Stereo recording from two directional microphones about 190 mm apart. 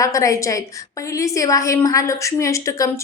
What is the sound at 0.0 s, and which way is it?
A woman's voice, 15° left (ahead or behind).